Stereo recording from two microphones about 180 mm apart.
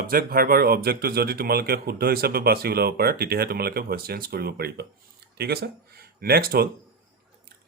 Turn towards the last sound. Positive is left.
turn(degrees=-60)  # may be behind; listen again after turning